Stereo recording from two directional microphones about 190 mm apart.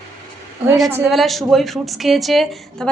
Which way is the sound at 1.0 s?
Centre (ahead or behind).